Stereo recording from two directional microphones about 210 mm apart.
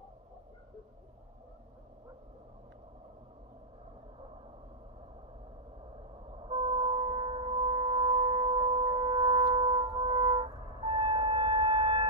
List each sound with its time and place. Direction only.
6.3 s shofar: 25° right (ahead or behind)
9.6 s brass instrument: 25° right (ahead or behind)